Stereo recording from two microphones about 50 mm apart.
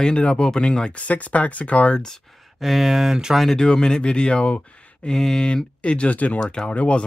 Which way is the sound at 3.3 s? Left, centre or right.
Centre.